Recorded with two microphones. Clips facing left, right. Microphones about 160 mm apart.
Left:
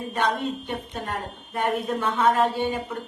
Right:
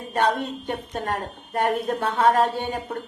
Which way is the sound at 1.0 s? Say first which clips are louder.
Right 3 dB; 50° right (ahead or behind).